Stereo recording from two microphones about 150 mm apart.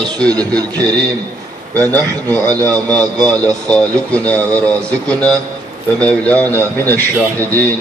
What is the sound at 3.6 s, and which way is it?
A man's voice, 5° left (ahead or behind).